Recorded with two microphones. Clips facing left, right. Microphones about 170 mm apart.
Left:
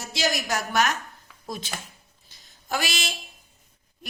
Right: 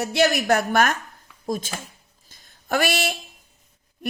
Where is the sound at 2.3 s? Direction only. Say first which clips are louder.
Right 5 dB; 55° right (ahead or behind).